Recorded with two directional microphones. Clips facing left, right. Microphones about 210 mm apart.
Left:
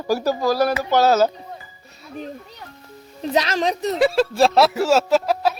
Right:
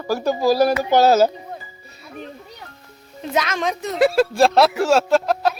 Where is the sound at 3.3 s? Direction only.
35° left (ahead or behind).